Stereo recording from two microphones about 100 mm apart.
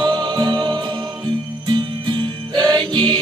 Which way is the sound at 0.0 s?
45° right (ahead or behind).